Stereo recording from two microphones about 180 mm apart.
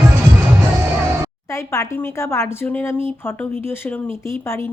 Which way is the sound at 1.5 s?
15° left (ahead or behind).